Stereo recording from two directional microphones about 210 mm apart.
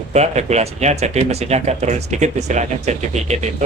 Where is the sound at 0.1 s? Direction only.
30° right (ahead or behind).